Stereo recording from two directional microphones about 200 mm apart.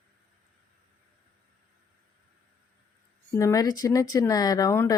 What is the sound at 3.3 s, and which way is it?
Speech, 15° left (ahead or behind).